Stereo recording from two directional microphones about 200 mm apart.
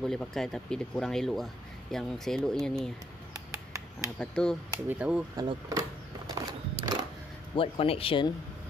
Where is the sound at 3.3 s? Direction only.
15° right (ahead or behind).